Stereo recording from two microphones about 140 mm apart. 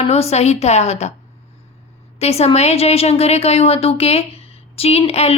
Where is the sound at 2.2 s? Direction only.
50° left (ahead or behind).